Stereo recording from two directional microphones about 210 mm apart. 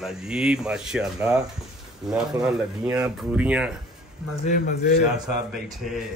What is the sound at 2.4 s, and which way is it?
Speech, 5° right (ahead or behind).